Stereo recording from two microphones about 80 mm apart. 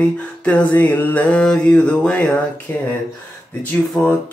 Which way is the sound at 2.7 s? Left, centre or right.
Left.